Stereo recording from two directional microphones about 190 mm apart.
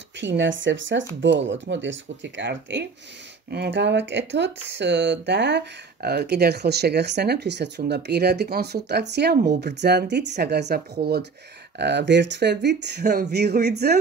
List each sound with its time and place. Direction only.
0.2 s speech: 75° right (ahead or behind); by 13.9 s 60° right (ahead or behind)